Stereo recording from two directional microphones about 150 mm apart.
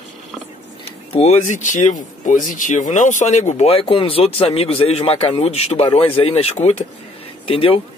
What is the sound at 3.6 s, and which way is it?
A man's voice, 40° left (ahead or behind).